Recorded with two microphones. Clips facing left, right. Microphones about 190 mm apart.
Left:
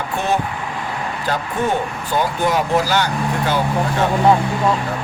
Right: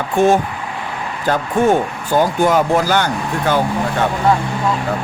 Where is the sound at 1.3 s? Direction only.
50° right (ahead or behind).